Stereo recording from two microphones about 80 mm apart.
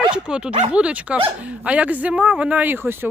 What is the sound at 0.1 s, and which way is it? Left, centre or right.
Speech, centre.